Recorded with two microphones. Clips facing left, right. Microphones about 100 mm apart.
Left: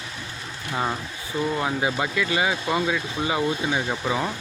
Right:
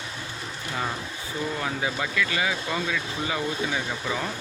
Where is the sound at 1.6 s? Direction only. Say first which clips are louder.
Left 4 dB; 25° left (ahead or behind).